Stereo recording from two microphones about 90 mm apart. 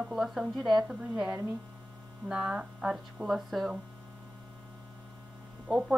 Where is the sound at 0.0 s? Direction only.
5° right (ahead or behind).